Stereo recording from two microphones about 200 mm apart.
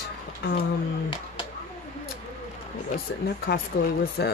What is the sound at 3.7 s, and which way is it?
Speech, 55° left (ahead or behind).